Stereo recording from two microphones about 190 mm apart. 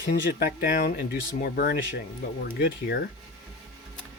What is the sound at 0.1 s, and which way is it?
Speech, 50° left (ahead or behind).